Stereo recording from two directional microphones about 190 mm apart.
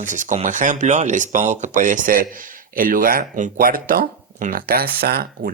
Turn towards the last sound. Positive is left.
turn(degrees=-55)  # may be behind; listen again after turning